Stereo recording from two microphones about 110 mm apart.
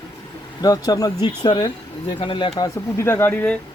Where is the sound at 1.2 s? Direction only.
50° left (ahead or behind).